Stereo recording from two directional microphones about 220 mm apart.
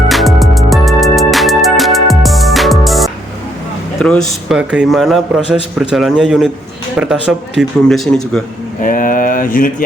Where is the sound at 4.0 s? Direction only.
5° left (ahead or behind).